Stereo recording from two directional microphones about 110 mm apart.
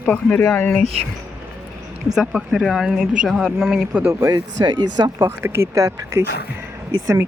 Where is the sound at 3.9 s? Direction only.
15° right (ahead or behind).